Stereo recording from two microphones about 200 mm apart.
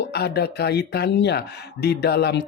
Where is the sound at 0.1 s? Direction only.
55° left (ahead or behind).